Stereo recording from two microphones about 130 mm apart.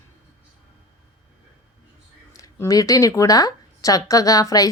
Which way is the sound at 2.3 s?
25° left (ahead or behind).